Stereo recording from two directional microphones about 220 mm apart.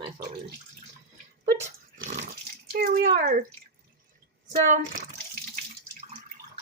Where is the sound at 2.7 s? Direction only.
45° right (ahead or behind).